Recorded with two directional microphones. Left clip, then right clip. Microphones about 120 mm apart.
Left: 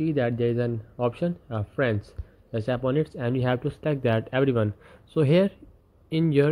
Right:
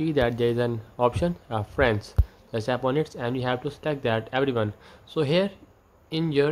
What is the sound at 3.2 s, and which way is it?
Speech, 25° left (ahead or behind).